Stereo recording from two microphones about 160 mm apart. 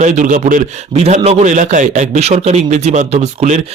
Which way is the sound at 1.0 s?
40° right (ahead or behind).